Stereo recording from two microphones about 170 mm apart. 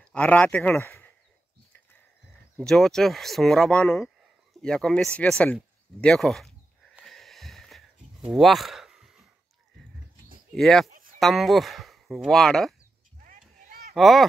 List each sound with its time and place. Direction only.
0.0 s speech: 5° left (ahead or behind)
2.5 s speech: centre (ahead or behind)
7.0 s a sound: centre (ahead or behind)
10.5 s speech: centre (ahead or behind)
10.9 s a sound: 55° right (ahead or behind)
11.1 s speech: centre (ahead or behind)
13.2 s vehicle: 55° right (ahead or behind)
13.9 s speech: centre (ahead or behind)